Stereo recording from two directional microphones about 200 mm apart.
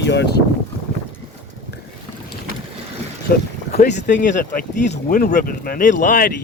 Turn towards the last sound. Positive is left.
turn(degrees=45)  # may be behind; listen again after turning